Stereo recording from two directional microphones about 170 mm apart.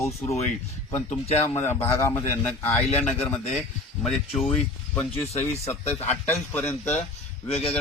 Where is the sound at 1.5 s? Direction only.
15° left (ahead or behind).